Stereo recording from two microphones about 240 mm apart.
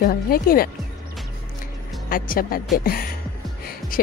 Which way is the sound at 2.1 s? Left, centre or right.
Left.